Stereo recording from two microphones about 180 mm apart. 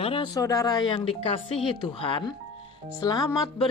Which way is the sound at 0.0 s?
30° left (ahead or behind).